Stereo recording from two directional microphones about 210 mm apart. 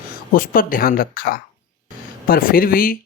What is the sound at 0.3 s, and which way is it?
Speech, 40° left (ahead or behind).